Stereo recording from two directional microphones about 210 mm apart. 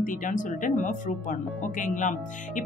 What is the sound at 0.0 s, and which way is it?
Speech, 40° left (ahead or behind).